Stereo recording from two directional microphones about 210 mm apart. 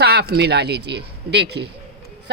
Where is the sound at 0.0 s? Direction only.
50° right (ahead or behind).